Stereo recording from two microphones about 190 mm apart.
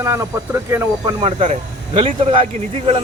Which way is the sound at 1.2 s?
30° right (ahead or behind).